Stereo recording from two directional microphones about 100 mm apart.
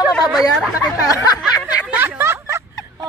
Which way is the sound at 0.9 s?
35° left (ahead or behind).